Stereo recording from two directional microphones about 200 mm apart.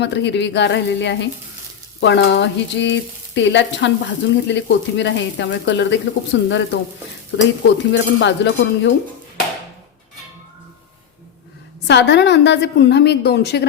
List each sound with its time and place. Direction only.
0.0 s frying: 60° left (ahead or behind)
11.9 s frying: 60° left (ahead or behind)